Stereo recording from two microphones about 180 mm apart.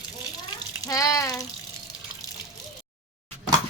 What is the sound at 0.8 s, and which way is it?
Water, 20° left (ahead or behind).